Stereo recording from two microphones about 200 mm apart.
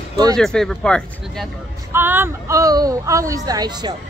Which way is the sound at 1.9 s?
10° right (ahead or behind).